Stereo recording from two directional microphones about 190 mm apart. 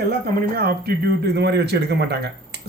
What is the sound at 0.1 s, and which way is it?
A man's voice, 55° right (ahead or behind).